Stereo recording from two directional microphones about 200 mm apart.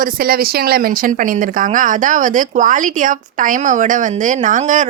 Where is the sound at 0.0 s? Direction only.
50° right (ahead or behind).